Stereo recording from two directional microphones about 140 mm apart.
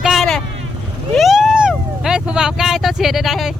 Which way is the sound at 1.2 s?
Centre (ahead or behind).